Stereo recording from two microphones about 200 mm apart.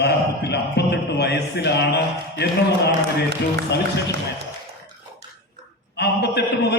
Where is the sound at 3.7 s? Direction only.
60° left (ahead or behind).